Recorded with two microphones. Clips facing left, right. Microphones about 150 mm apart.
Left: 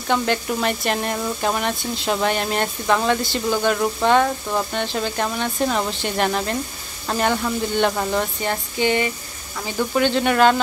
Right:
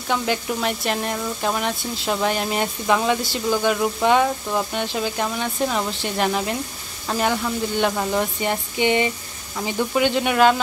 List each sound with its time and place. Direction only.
0.1 s speech: 5° right (ahead or behind)
8.4 s a sound: 20° right (ahead or behind)
9.6 s speech: 15° right (ahead or behind)